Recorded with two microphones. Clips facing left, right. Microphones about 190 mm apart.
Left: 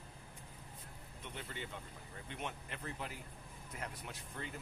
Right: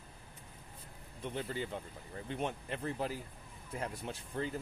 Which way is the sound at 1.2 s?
30° right (ahead or behind).